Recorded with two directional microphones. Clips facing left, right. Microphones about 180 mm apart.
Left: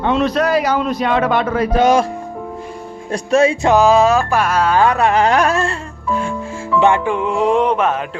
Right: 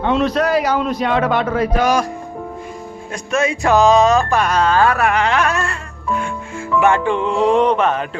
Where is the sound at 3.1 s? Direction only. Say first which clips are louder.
Left 6 dB; 30° left (ahead or behind).